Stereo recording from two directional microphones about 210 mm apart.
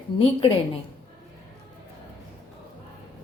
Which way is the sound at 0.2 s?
30° left (ahead or behind).